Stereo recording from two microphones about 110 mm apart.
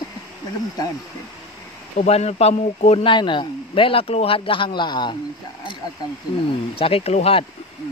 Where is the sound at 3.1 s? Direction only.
45° left (ahead or behind).